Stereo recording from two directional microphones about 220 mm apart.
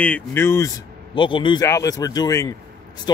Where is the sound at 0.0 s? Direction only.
10° left (ahead or behind).